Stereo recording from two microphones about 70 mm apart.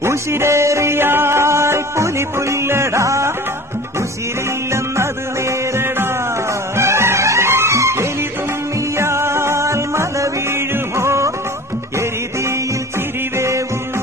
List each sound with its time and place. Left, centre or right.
0.0 s music: right
6.8 s music: right